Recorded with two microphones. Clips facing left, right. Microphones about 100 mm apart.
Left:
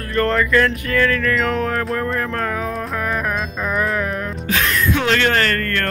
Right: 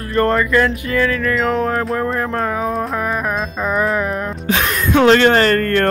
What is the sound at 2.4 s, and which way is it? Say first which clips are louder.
Music: right 4 dB; 20° right (ahead or behind).